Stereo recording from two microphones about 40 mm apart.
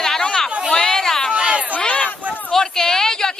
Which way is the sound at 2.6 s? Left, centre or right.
Centre.